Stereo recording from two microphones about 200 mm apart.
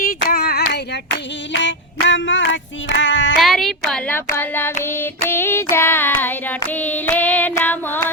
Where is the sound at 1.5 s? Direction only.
65° left (ahead or behind).